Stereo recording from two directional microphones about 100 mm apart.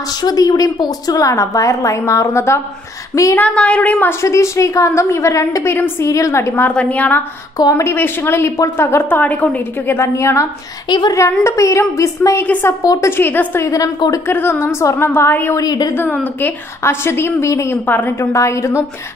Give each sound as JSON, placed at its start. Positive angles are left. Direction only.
{"t": 0.2, "sound": "a woman's voice", "side_deg": 40}
{"t": 3.3, "sound": "a woman's voice", "side_deg": 15}
{"t": 4.2, "sound": "a woman's voice", "side_deg": 30}
{"t": 6.7, "sound": "a woman's voice", "side_deg": 10}
{"t": 12.8, "sound": "a woman's voice", "side_deg": 35}
{"t": 13.1, "sound": "a woman's voice", "side_deg": 20}
{"t": 15.5, "sound": "a woman's voice", "side_deg": 40}
{"t": 15.9, "sound": "a woman's voice", "side_deg": 20}
{"t": 17.8, "sound": "a woman's voice", "side_deg": 20}